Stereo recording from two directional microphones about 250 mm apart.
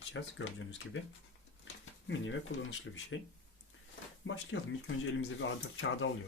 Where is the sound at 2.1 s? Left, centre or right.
Left.